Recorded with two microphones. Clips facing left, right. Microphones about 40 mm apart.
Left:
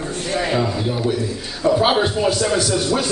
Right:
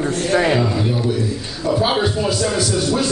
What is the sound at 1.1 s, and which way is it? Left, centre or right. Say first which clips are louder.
Speech: right 1 dB; left.